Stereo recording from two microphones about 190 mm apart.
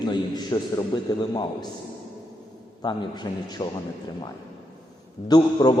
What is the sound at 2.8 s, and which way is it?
Speech, 25° left (ahead or behind).